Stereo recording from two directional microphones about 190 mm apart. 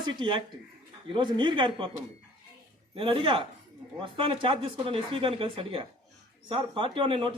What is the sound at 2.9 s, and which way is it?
A man's voice, 25° right (ahead or behind).